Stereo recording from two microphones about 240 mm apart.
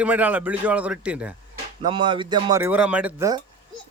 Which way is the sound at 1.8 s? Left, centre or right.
Centre.